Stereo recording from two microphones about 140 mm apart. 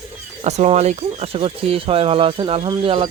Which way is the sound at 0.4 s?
50° right (ahead or behind).